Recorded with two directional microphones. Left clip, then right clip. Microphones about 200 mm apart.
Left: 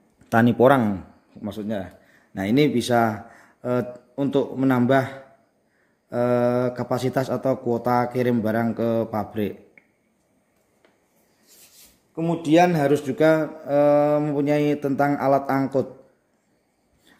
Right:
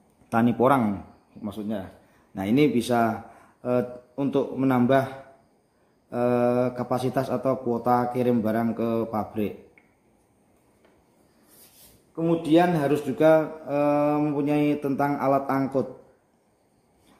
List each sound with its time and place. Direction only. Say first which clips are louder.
0.3 s speech: left 4 dB; 45° left (ahead or behind)
12.2 s speech: left 3 dB; 50° left (ahead or behind)